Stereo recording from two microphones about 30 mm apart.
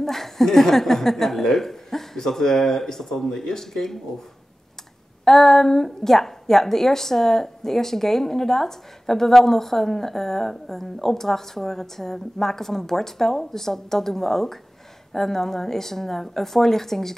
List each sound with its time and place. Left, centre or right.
0.0 s a woman's voice: centre
5.2 s a woman's voice: centre